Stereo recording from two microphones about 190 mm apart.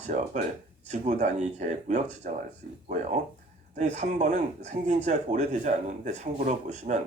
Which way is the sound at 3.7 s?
40° right (ahead or behind).